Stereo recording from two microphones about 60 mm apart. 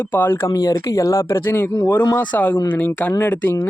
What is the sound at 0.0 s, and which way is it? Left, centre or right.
Speech, left.